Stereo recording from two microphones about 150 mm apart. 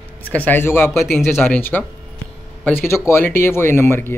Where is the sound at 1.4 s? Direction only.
10° left (ahead or behind).